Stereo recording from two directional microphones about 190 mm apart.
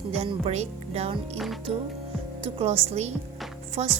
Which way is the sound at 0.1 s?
30° right (ahead or behind).